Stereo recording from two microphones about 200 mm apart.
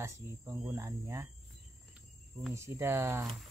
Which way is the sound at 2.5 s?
15° right (ahead or behind).